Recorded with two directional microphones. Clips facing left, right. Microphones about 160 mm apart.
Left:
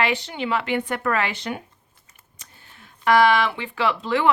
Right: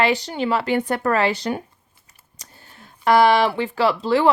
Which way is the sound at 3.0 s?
35° right (ahead or behind).